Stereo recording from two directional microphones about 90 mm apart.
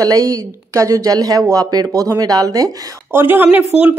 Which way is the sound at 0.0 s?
40° right (ahead or behind).